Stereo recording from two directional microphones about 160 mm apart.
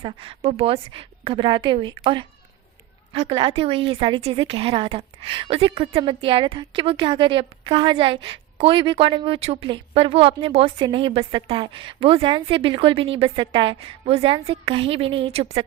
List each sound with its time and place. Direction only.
0.0 s a woman's voice: 35° right (ahead or behind)